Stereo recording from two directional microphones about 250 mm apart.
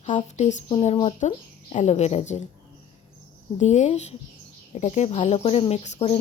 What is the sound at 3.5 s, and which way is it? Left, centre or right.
A woman's voice, left.